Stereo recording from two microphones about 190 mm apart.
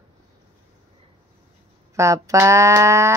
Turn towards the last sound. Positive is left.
turn(degrees=-15)  # may be behind; listen again after turning